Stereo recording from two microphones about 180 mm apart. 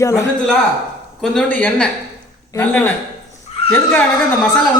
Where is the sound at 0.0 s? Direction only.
15° left (ahead or behind).